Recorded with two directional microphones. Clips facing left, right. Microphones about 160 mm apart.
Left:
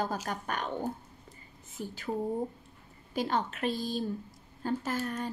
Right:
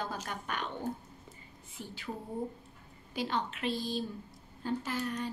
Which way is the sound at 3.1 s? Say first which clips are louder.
Left 3 dB; 45° left (ahead or behind).